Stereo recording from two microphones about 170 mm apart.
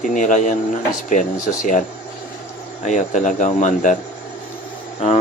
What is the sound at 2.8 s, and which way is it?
Speech, 45° left (ahead or behind).